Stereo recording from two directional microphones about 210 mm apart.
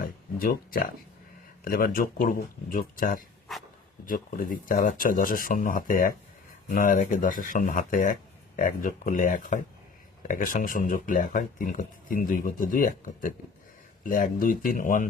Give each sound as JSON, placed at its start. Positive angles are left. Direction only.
{"t": 0.0, "sound": "speech", "side_deg": 45}
{"t": 3.5, "sound": "dog", "side_deg": 0}
{"t": 4.0, "sound": "speech", "side_deg": 40}
{"t": 14.0, "sound": "speech", "side_deg": 40}